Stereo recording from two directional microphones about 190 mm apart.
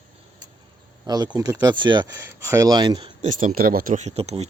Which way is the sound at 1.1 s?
20° right (ahead or behind).